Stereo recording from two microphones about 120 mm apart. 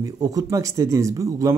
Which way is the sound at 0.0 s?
30° right (ahead or behind).